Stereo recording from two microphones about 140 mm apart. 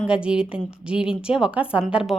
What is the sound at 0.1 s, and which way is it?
A woman's voice, 5° right (ahead or behind).